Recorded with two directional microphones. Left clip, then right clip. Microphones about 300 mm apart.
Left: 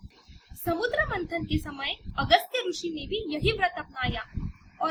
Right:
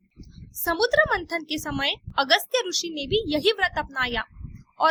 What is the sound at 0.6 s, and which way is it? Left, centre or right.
A woman's voice, right.